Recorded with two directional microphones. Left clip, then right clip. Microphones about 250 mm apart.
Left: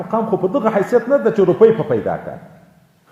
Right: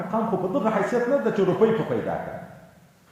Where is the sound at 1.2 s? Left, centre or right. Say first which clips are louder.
Left 9 dB; left.